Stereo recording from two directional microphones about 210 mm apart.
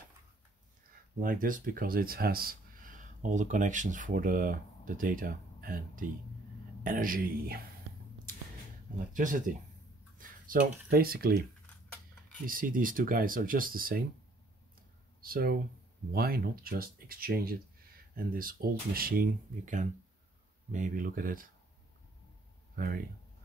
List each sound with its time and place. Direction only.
1.2 s speech: 40° right (ahead or behind)
9.1 s speech: 40° right (ahead or behind)
12.4 s speech: 40° right (ahead or behind)
15.2 s speech: 45° right (ahead or behind)
22.8 s speech: 45° right (ahead or behind)